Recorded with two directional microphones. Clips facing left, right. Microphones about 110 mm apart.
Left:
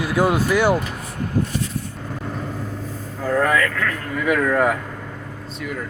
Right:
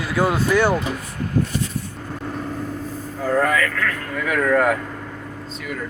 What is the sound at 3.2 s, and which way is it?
Vehicle, centre (ahead or behind).